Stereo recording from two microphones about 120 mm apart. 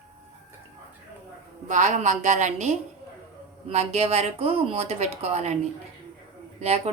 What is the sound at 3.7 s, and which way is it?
Speech, 60° right (ahead or behind).